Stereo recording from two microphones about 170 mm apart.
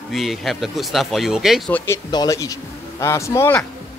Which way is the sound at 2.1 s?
20° left (ahead or behind).